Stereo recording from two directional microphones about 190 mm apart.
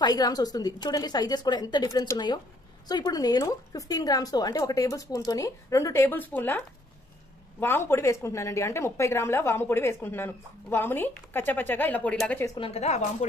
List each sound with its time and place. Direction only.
0.0 s a woman's voice: 20° left (ahead or behind)
7.6 s a woman's voice: 15° left (ahead or behind)
12.5 s a woman's voice: 30° left (ahead or behind)